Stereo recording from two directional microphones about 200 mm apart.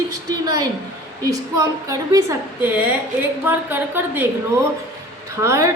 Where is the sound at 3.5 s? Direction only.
10° right (ahead or behind).